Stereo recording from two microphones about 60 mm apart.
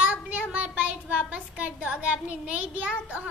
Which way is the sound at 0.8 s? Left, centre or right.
Right.